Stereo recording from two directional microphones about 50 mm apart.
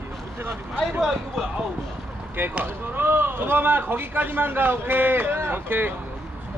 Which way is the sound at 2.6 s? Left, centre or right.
Right.